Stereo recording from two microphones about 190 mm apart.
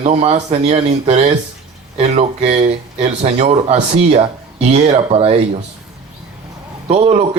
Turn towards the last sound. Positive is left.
turn(degrees=-35)  # may be behind; listen again after turning